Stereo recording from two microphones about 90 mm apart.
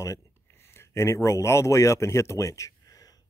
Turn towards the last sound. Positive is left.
turn(degrees=40)  # may be behind; listen again after turning